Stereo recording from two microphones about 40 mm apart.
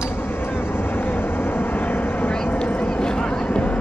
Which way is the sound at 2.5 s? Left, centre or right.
Left.